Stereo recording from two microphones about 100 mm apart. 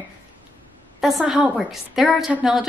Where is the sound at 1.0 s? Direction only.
5° right (ahead or behind).